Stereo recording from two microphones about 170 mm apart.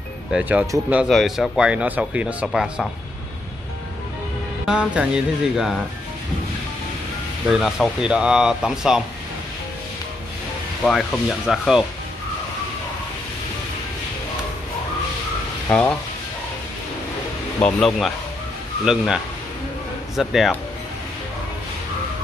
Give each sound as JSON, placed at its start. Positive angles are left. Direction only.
{"t": 0.3, "sound": "speech", "side_deg": -5}
{"t": 4.6, "sound": "speech", "side_deg": -5}
{"t": 7.4, "sound": "speech", "side_deg": 0}
{"t": 10.8, "sound": "speech", "side_deg": 0}
{"t": 15.7, "sound": "speech", "side_deg": 5}
{"t": 17.6, "sound": "speech", "side_deg": 5}